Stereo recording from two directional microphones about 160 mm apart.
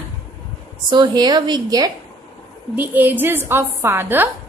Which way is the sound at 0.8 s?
25° right (ahead or behind).